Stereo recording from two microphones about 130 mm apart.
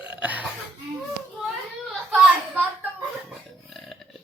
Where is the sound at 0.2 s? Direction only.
10° right (ahead or behind).